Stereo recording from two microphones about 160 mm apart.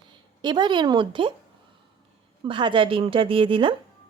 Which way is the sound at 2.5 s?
30° right (ahead or behind).